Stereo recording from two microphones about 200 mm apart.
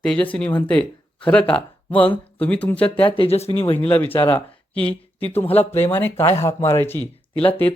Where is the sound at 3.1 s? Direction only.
30° left (ahead or behind).